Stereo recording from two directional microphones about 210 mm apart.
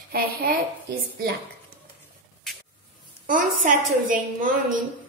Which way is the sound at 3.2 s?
40° right (ahead or behind).